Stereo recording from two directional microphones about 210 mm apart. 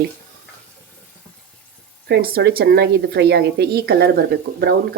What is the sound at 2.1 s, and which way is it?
A woman's voice, 50° right (ahead or behind).